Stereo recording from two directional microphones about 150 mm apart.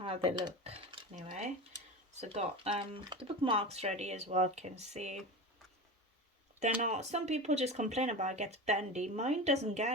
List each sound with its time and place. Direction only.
0.0 s speech: 40° right (ahead or behind)
1.1 s speech: 55° right (ahead or behind)
2.3 s speech: 40° right (ahead or behind)
6.8 s speech: 50° right (ahead or behind)